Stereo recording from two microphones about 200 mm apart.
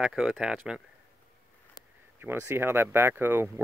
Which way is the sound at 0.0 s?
Centre (ahead or behind).